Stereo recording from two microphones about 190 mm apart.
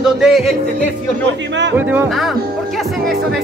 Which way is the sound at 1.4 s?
70° right (ahead or behind).